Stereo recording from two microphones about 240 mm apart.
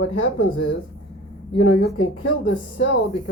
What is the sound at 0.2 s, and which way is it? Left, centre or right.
Speech, left.